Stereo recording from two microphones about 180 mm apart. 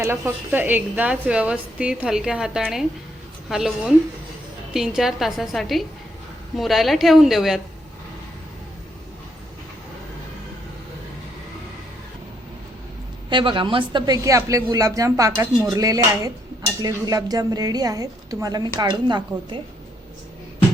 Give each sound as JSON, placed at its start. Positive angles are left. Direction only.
{"t": 0.0, "sound": "a woman's voice", "side_deg": -10}
{"t": 13.3, "sound": "speech", "side_deg": -25}